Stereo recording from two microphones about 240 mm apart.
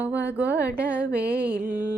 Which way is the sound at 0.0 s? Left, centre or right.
Centre.